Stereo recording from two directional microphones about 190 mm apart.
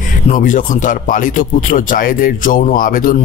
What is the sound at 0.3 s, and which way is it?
Speech, 45° left (ahead or behind).